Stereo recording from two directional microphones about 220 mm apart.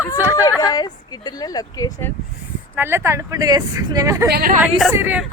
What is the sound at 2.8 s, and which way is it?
Speech, 10° right (ahead or behind).